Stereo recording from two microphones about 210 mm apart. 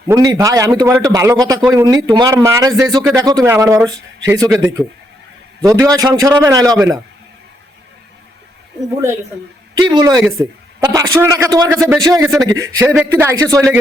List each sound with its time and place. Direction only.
0.1 s a man's voice: 15° right (ahead or behind)
4.4 s a man's voice: centre (ahead or behind)
5.6 s a man's voice: 15° right (ahead or behind)
9.7 s a man's voice: 20° right (ahead or behind)